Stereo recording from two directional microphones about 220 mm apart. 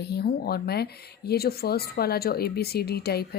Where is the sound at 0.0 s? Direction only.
45° left (ahead or behind).